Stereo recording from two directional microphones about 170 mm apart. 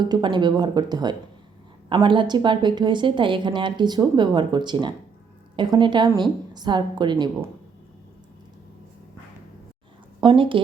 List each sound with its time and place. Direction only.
0.0 s speech: 25° right (ahead or behind)
10.2 s speech: 30° right (ahead or behind)